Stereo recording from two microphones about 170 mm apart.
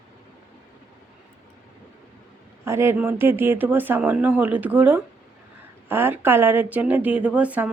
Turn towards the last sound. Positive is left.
turn(degrees=-10)  # may be behind; listen again after turning